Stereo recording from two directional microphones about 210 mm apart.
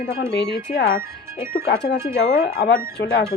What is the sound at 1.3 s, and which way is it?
Speech, 10° right (ahead or behind).